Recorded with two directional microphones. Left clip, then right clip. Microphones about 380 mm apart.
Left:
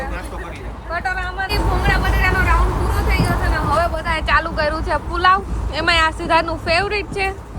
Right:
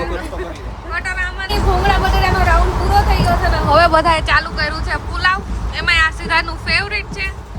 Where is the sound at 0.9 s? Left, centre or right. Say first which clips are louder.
Right 1 dB; centre.